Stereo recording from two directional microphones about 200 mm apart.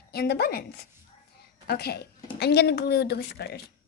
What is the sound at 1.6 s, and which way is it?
A child's voice, 50° left (ahead or behind).